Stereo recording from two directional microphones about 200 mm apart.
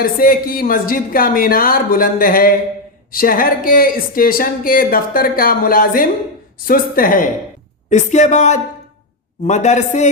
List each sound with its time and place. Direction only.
0.0 s speech: 45° left (ahead or behind)